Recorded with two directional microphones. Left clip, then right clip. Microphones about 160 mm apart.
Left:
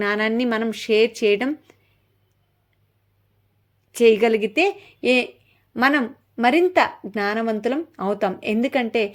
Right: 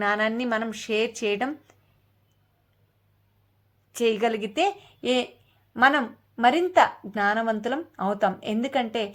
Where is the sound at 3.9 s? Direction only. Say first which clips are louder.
Left 8 dB; 35° left (ahead or behind).